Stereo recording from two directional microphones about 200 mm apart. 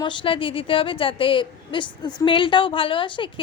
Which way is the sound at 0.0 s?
25° left (ahead or behind).